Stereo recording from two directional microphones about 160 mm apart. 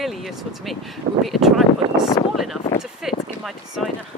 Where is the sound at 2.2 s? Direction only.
15° left (ahead or behind).